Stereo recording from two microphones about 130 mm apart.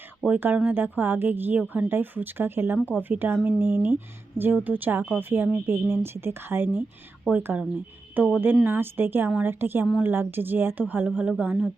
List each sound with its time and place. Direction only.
0.3 s speech: 15° right (ahead or behind)